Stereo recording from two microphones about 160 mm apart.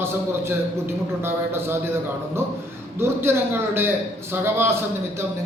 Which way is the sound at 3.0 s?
15° right (ahead or behind).